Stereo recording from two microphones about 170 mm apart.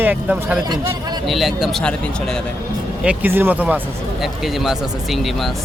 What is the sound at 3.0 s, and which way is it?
Speech, 10° right (ahead or behind).